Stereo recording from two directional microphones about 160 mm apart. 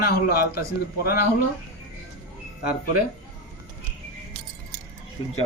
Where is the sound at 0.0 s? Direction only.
75° left (ahead or behind).